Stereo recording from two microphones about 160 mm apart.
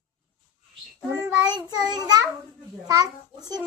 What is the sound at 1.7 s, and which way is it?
Speech, 25° right (ahead or behind).